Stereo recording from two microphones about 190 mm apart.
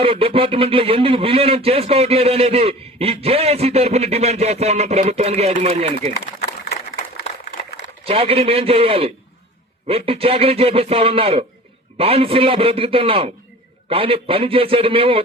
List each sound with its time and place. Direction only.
0.0 s speech: 30° right (ahead or behind)
8.0 s a man's voice: 30° right (ahead or behind)